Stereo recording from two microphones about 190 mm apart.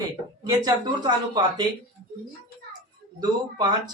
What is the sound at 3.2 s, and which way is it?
Speech, 20° right (ahead or behind).